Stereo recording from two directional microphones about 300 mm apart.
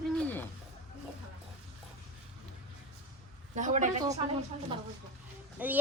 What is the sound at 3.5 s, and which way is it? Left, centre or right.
Speech, right.